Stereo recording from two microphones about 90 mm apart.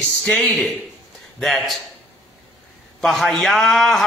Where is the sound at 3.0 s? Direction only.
5° left (ahead or behind).